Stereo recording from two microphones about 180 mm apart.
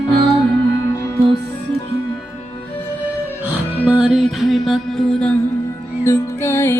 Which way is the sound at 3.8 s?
5° right (ahead or behind).